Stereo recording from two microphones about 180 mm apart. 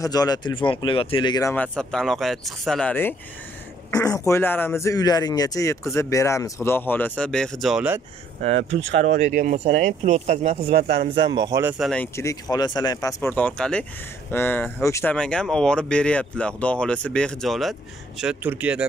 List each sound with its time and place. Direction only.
0.0 s speech: 20° left (ahead or behind)
1.5 s speech: 5° left (ahead or behind)
8.5 s speech: 85° right
9.2 s speech: 45° right (ahead or behind)
11.0 s a man's voice: 25° right (ahead or behind)
11.8 s speech: 5° left (ahead or behind)
12.2 s speech: 20° left (ahead or behind); by 18.9 s 10° right (ahead or behind)